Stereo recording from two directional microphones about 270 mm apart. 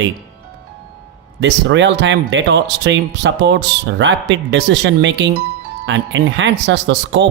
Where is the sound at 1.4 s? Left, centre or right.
Right.